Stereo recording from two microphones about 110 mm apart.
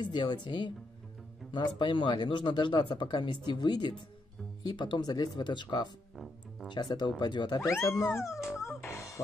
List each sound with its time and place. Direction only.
0.0 s speech: 45° left (ahead or behind)
6.1 s music: centre (ahead or behind)
6.7 s speech: 40° left (ahead or behind)
7.8 s music: 25° left (ahead or behind)